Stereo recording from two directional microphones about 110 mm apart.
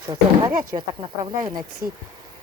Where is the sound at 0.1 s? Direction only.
40° right (ahead or behind).